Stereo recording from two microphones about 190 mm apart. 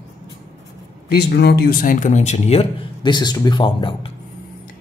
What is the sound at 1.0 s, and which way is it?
Speech, 55° left (ahead or behind).